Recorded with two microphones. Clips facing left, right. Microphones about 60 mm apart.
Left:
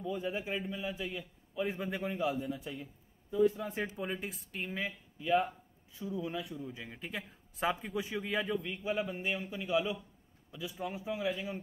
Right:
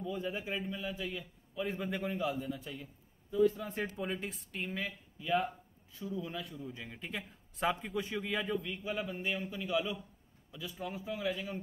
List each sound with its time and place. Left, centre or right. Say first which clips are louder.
0.0 s a man's voice: left 1 dB; centre
2.8 s speech: left 3 dB; left
3.7 s a man's voice: even; centre
5.9 s a man's voice: left 2 dB; centre
8.8 s a man's voice: left 2 dB; centre